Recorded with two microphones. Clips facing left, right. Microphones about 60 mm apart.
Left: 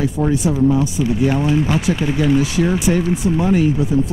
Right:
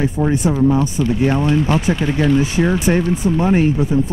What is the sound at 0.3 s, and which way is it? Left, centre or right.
Speech, right.